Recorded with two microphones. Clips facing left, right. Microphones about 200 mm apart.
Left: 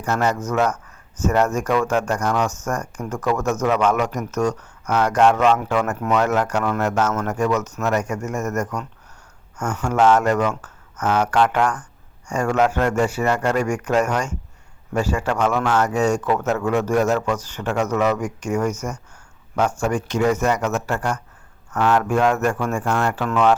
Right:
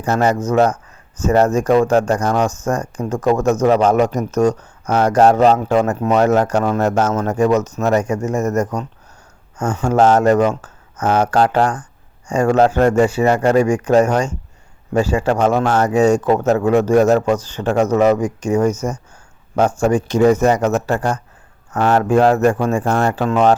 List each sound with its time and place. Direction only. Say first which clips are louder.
0.3 s speech: right 6 dB; 35° right (ahead or behind)
2.6 s speech: right 6 dB; 15° right (ahead or behind)
3.1 s speech: right 6 dB; 30° right (ahead or behind)
13.2 s speech: right 6 dB; 20° right (ahead or behind)
13.5 s speech: right 7 dB; 30° right (ahead or behind)